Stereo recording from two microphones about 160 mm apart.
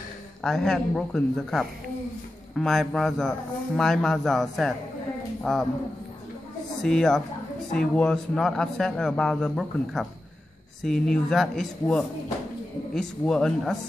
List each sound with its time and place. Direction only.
0.4 s a man's voice: 5° left (ahead or behind)
6.8 s a man's voice: 5° left (ahead or behind)